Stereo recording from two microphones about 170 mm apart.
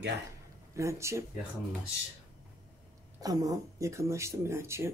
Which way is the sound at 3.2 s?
20° right (ahead or behind).